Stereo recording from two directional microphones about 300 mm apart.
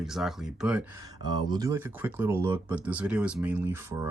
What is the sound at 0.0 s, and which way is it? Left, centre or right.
Speech, centre.